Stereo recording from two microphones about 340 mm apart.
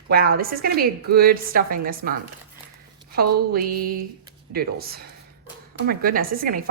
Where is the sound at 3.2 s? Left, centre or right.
Right.